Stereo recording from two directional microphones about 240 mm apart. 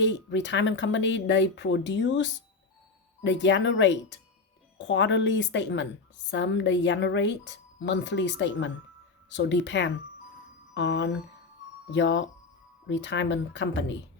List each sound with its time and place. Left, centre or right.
0.0 s speech: left